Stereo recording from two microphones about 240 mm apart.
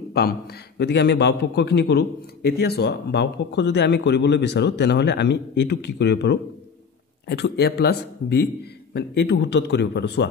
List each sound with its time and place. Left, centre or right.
0.1 s a man's voice: left